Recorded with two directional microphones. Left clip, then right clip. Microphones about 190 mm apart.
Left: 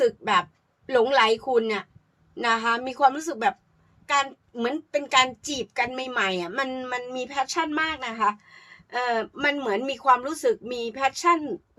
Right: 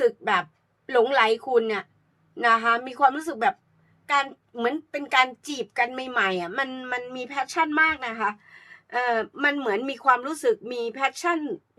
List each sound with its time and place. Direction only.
0.0 s a woman's voice: 15° right (ahead or behind)